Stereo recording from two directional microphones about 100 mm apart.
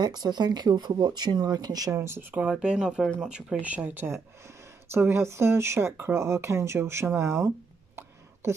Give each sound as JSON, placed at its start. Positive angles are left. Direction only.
{"t": 0.0, "sound": "speech", "side_deg": -45}
{"t": 2.0, "sound": "speech", "side_deg": -25}
{"t": 2.3, "sound": "speech", "side_deg": -10}